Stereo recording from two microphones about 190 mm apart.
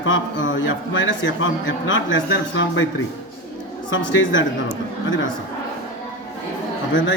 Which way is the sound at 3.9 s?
85° left.